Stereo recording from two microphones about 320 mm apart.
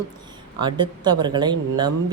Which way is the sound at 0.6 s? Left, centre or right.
Centre.